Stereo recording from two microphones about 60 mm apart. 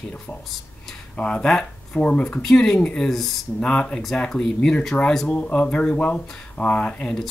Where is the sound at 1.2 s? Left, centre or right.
Centre.